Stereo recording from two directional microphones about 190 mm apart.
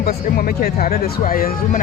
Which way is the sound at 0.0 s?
55° left (ahead or behind).